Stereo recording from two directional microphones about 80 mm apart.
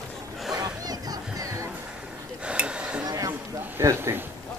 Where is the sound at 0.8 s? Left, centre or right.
Right.